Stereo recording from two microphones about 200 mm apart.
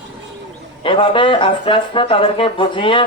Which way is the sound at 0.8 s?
25° left (ahead or behind).